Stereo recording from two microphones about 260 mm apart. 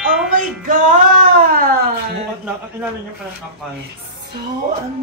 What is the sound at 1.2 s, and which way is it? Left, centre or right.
Cat, right.